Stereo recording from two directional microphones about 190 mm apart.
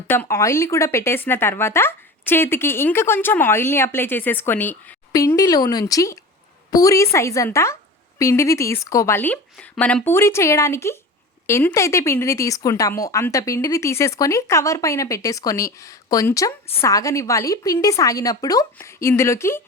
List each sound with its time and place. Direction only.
0.1 s speech: 15° left (ahead or behind)